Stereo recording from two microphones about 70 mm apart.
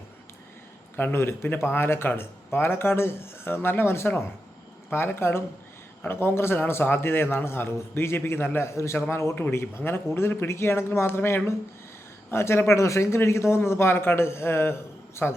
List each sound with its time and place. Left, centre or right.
0.9 s a man's voice: left